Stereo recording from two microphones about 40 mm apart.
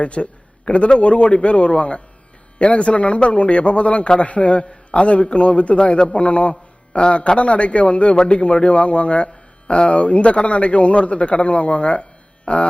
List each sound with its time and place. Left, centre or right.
0.0 s a man's voice: left